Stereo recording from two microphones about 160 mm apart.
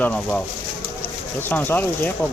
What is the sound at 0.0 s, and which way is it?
Speech, 10° left (ahead or behind).